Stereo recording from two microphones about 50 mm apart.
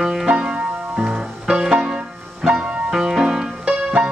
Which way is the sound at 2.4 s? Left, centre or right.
Centre.